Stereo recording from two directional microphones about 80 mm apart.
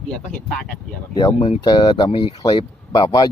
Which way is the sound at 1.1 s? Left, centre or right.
Left.